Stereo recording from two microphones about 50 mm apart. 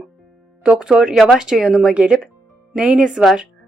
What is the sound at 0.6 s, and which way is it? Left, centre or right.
Speech, centre.